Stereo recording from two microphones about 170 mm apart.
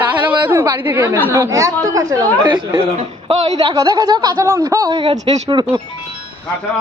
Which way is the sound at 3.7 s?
20° right (ahead or behind).